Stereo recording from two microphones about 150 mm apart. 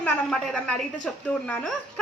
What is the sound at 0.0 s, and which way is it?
A woman's voice, 5° left (ahead or behind).